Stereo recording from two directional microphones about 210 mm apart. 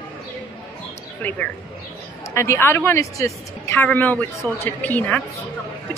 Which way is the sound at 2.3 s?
15° left (ahead or behind).